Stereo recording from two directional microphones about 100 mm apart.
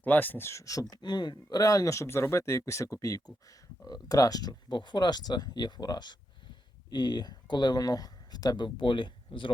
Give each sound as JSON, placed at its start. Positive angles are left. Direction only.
{"t": 0.0, "sound": "speech", "side_deg": 20}